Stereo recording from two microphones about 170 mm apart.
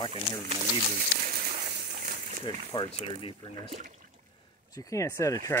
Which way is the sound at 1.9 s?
55° right (ahead or behind).